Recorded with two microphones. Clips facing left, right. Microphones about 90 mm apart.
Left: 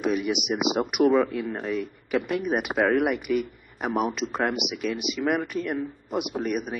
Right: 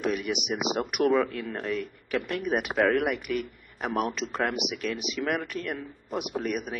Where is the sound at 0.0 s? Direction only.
10° left (ahead or behind).